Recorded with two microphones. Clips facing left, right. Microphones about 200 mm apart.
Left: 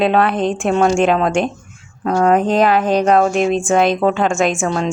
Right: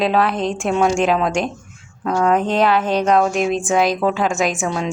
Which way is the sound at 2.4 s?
40° left (ahead or behind).